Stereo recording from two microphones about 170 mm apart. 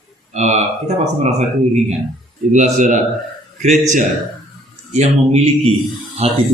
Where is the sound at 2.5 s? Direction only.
45° right (ahead or behind).